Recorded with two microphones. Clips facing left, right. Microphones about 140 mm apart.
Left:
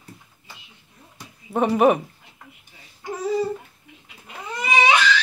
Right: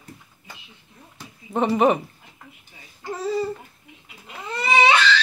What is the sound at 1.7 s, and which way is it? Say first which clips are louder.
Speech: left 2 dB; 5° left (ahead or behind).